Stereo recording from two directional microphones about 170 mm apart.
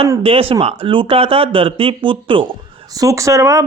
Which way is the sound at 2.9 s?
20° right (ahead or behind).